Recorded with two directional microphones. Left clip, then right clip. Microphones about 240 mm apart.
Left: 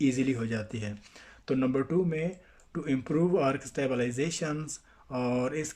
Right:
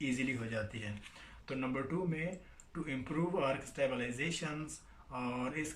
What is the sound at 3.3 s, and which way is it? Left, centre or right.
Speech, left.